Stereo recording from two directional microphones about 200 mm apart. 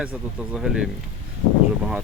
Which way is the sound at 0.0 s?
5° right (ahead or behind).